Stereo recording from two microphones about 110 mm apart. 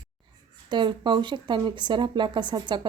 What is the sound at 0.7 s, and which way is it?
A woman's voice, 45° right (ahead or behind).